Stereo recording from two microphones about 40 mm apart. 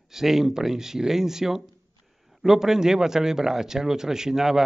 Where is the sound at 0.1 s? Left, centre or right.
Centre.